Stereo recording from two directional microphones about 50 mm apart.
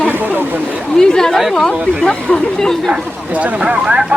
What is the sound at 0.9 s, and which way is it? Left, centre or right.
Speech, centre.